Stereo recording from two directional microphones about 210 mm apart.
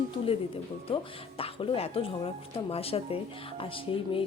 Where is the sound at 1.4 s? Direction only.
25° left (ahead or behind).